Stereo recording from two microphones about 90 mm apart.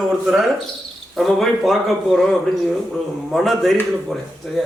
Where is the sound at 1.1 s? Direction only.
Centre (ahead or behind).